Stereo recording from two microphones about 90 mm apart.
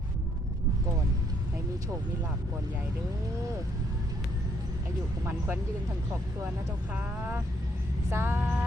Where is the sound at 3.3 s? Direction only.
35° right (ahead or behind).